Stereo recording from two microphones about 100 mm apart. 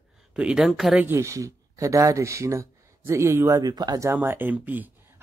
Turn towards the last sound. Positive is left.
turn(degrees=-15)  # may be behind; listen again after turning